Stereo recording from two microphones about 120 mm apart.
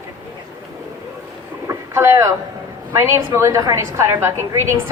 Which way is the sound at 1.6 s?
25° right (ahead or behind).